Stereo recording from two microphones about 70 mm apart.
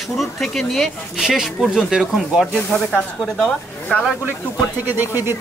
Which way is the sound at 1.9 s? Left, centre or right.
Centre.